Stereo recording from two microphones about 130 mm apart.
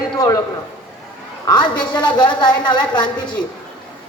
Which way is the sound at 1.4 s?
35° left (ahead or behind).